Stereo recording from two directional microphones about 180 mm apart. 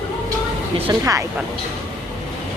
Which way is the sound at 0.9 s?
20° right (ahead or behind).